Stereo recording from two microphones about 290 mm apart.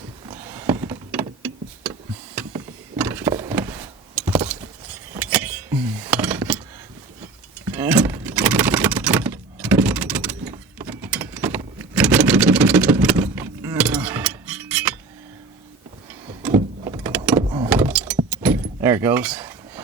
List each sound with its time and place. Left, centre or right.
0.3 s power windows: centre
5.1 s a sound: centre
7.6 s a sound: centre
16.4 s power windows: centre
17.4 s vehicle: centre
17.7 s door: centre
18.3 s keys jangling: centre